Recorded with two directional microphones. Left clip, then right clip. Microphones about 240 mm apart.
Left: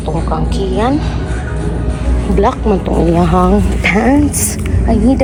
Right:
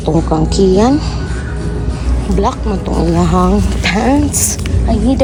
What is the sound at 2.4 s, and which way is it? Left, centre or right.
Speech, centre.